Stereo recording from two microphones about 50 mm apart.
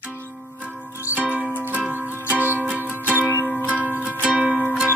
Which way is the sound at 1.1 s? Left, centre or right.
Right.